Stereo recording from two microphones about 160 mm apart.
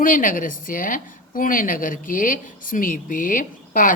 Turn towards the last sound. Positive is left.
turn(degrees=55)  # may be behind; listen again after turning